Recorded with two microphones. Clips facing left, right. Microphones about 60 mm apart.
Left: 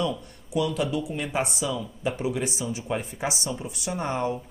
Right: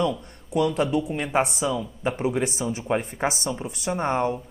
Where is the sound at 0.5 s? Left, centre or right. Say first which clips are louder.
Right 4 dB; right.